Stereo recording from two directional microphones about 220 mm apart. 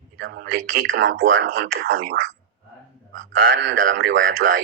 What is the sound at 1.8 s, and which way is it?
Speech, 40° right (ahead or behind).